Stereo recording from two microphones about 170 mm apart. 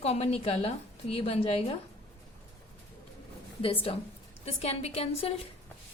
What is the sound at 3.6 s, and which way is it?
A woman's voice, 30° left (ahead or behind).